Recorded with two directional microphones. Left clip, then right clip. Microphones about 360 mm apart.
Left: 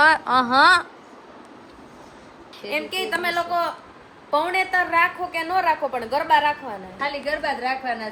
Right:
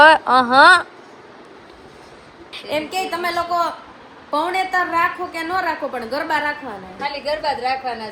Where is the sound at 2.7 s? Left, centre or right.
Centre.